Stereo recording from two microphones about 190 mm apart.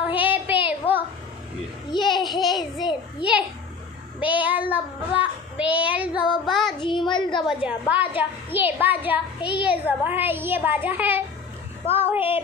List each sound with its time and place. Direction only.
0.2 s child singing: 10° right (ahead or behind)
0.7 s a sound: 10° right (ahead or behind)
1.9 s a child's voice: 25° left (ahead or behind)
4.2 s a child's voice: 10° right (ahead or behind)
6.4 s child singing: centre (ahead or behind)
6.8 s a child's voice: 25° left (ahead or behind)
7.4 s a child's voice: 5° right (ahead or behind)